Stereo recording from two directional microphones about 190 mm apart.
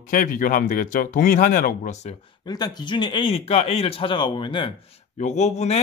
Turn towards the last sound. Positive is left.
turn(degrees=35)  # may be behind; listen again after turning